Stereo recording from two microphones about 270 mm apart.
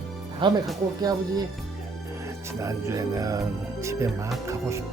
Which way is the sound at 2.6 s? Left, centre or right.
Centre.